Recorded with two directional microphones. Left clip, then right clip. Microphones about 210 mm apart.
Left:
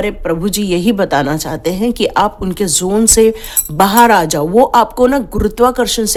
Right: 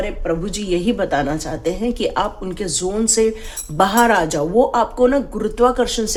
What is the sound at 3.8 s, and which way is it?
A woman's voice, 35° left (ahead or behind).